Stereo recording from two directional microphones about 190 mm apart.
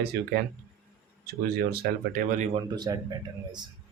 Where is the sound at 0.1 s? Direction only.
60° right (ahead or behind).